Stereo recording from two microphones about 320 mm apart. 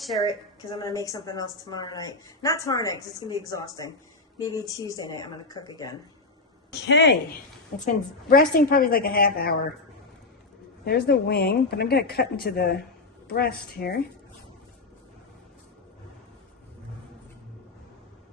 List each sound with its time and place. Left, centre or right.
0.0 s a woman's voice: centre
0.7 s a woman's voice: centre
6.8 s speech: left
10.8 s speech: left